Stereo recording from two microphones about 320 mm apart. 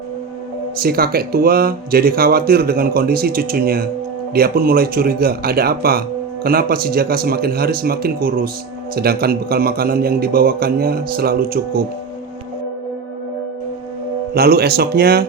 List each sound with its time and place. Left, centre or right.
0.8 s speech: right
14.3 s speech: right